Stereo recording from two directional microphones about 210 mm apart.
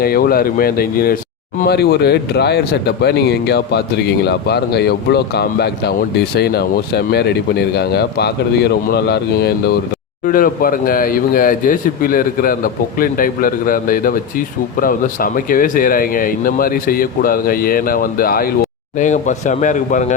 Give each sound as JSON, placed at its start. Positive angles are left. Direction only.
{"t": 0.0, "sound": "a man's voice", "side_deg": 45}